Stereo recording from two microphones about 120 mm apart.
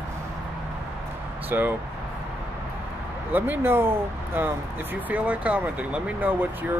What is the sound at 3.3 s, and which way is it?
Speech, 15° right (ahead or behind).